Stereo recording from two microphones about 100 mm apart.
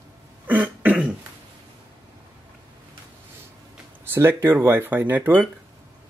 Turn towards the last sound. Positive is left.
turn(degrees=-20)  # may be behind; listen again after turning